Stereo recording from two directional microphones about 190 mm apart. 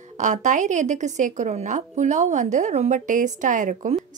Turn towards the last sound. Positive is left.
turn(degrees=-40)  # may be behind; listen again after turning